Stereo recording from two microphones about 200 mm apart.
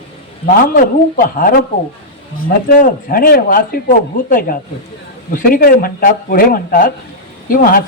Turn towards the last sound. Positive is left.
turn(degrees=45)  # may be behind; listen again after turning